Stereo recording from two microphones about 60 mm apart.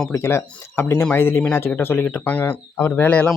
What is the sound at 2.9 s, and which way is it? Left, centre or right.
Speech, left.